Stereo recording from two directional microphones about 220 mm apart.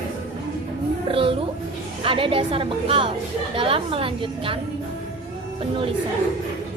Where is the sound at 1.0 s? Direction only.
25° right (ahead or behind).